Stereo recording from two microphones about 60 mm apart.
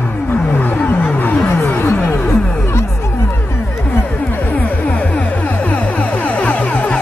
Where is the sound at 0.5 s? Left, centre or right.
Left.